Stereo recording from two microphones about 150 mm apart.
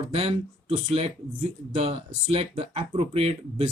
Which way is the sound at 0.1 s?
40° right (ahead or behind).